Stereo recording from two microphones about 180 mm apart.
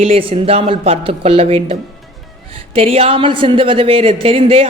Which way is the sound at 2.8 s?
30° right (ahead or behind).